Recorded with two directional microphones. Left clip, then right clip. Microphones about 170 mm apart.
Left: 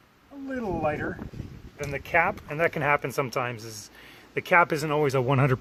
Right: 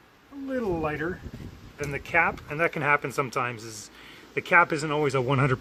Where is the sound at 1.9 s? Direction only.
40° left (ahead or behind).